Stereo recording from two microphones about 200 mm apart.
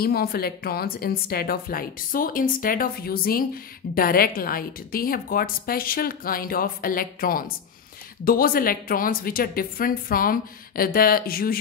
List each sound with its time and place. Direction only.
0.0 s a woman's voice: 50° left (ahead or behind)